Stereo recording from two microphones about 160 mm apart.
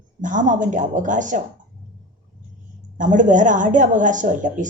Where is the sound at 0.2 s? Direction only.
50° right (ahead or behind).